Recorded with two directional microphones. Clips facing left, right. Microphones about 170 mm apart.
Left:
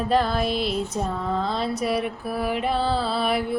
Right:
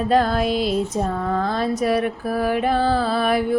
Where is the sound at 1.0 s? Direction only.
60° right (ahead or behind).